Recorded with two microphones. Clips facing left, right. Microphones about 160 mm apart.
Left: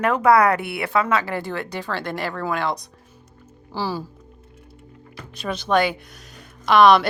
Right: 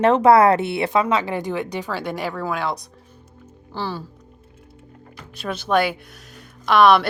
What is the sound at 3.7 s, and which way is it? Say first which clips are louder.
Speech: left 2 dB; 5° left (ahead or behind).